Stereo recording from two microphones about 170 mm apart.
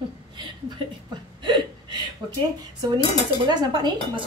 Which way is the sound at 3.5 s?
25° right (ahead or behind).